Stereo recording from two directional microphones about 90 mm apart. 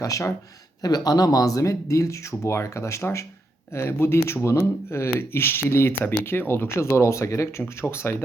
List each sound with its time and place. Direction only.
0.0 s speech: 35° left (ahead or behind)
0.8 s speech: 50° left (ahead or behind); by 8.1 s 30° left (ahead or behind)